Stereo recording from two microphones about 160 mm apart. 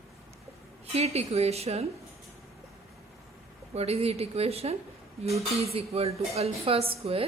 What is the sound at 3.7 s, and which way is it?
A woman's voice, 40° right (ahead or behind).